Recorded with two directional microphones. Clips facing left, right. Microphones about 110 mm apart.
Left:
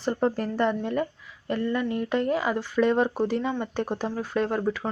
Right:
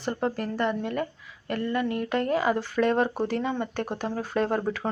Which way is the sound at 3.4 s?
15° right (ahead or behind).